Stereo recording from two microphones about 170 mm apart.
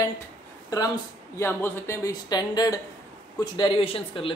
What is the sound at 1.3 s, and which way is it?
A man's voice, 15° left (ahead or behind).